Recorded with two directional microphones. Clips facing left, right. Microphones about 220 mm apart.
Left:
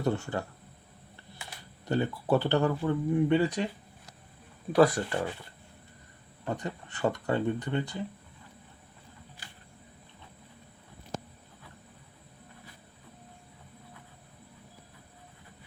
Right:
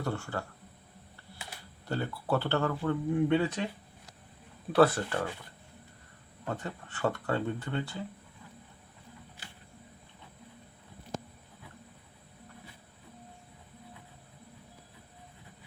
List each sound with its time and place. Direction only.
0.0 s speech: 20° left (ahead or behind)
1.9 s speech: 15° left (ahead or behind)
4.7 s speech: 10° left (ahead or behind)
6.4 s speech: 15° left (ahead or behind)